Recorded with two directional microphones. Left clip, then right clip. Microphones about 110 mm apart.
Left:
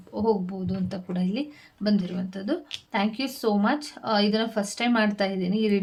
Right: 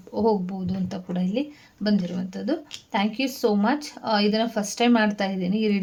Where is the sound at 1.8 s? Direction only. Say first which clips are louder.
Right 1 dB; 25° right (ahead or behind).